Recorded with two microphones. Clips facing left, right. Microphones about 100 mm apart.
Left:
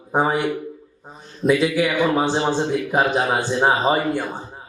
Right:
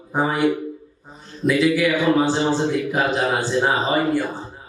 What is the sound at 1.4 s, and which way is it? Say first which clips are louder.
A man's voice: even; 20° left (ahead or behind).